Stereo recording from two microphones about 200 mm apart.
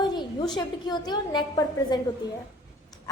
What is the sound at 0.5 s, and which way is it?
A woman's voice, 20° left (ahead or behind).